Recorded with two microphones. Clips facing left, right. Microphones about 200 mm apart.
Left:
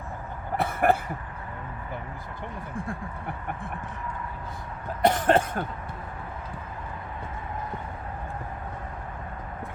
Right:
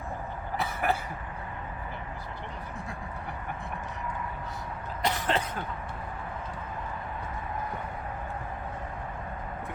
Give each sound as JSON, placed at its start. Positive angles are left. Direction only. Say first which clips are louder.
{"t": 0.5, "sound": "cough", "louder": "left 7 dB", "side_deg": 55}
{"t": 5.0, "sound": "cough", "louder": "left 8 dB", "side_deg": 50}